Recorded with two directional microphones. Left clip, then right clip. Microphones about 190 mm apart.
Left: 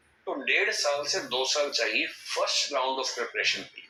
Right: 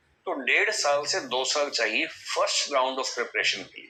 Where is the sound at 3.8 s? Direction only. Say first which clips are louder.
Right 2 dB; 60° right (ahead or behind).